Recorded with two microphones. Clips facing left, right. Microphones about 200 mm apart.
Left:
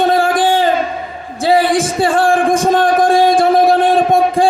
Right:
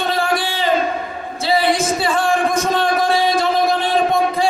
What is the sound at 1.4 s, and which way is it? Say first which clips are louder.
Music: left 5 dB; 50° left (ahead or behind).